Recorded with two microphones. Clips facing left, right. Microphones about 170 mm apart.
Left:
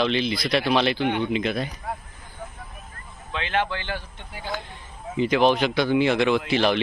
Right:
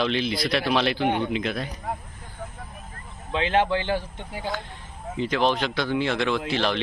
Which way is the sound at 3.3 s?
30° right (ahead or behind).